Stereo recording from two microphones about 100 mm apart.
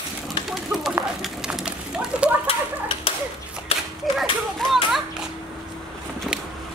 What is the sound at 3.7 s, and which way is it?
Children playing, 80° left.